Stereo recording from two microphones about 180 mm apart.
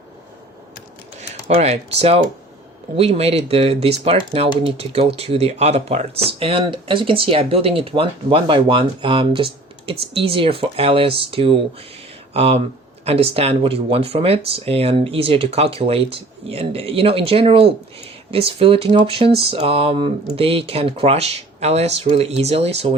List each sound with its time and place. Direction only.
1.5 s speech: 35° right (ahead or behind)